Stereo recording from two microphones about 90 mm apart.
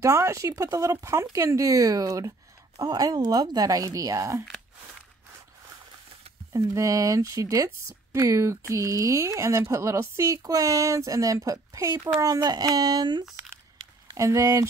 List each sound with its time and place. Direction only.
0.0 s speech: 35° right (ahead or behind)
6.5 s speech: 40° right (ahead or behind)
14.1 s speech: 35° right (ahead or behind)